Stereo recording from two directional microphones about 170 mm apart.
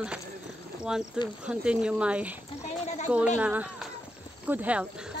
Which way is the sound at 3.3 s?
10° right (ahead or behind).